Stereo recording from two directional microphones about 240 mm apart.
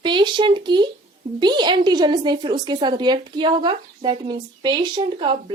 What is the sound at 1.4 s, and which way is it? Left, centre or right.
A woman's voice, centre.